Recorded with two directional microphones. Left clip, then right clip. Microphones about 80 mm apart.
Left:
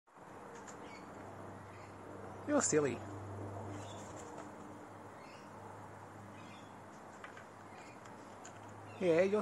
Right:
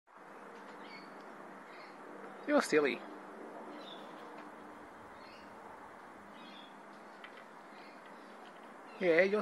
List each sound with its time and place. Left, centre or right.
2.4 s speech: centre
9.0 s speech: centre